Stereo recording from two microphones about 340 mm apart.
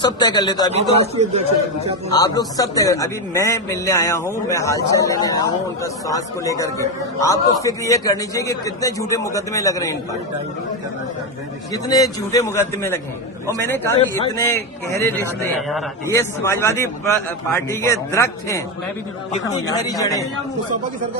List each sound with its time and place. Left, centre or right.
0.0 s speech: centre
0.7 s a man's voice: centre
2.1 s speech: centre
11.7 s speech: centre